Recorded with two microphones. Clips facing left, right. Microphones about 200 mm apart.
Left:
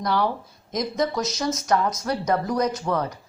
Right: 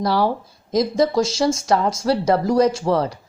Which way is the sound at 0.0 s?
35° right (ahead or behind).